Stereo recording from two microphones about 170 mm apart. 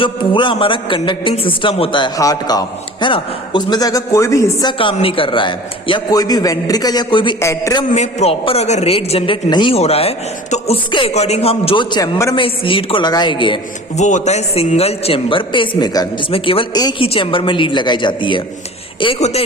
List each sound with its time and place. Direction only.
0.0 s a man's voice: 30° left (ahead or behind)
4.9 s a man's voice: 30° left (ahead or behind)
7.3 s a man's voice: 15° left (ahead or behind)
7.9 s a man's voice: 40° left (ahead or behind)
13.9 s a man's voice: 45° left (ahead or behind)